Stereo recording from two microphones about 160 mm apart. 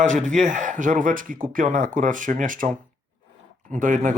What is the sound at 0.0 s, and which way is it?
Speech, 50° right (ahead or behind).